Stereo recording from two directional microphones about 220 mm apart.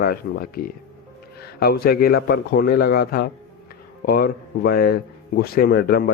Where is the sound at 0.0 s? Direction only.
45° left (ahead or behind).